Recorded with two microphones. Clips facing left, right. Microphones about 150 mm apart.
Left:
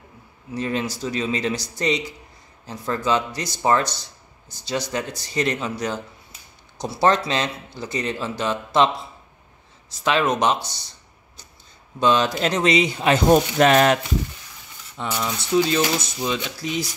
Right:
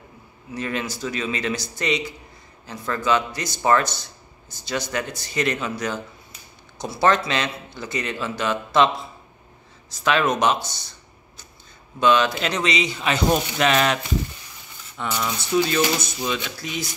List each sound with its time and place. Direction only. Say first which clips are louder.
0.6 s speech: left 2 dB; 30° left (ahead or behind)
12.0 s speech: even; 35° left (ahead or behind)
15.0 s speech: even; 10° left (ahead or behind)
15.5 s speech: left 1 dB; 25° left (ahead or behind)